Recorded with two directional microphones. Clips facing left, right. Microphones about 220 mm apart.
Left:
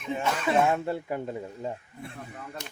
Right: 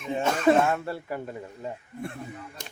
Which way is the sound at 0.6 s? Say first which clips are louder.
Left 1 dB; 15° left (ahead or behind).